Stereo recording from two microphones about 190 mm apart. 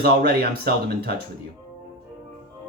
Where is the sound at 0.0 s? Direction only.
55° right (ahead or behind).